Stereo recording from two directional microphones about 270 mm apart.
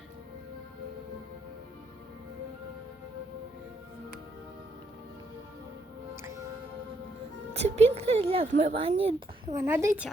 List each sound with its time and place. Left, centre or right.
7.5 s a woman's voice: right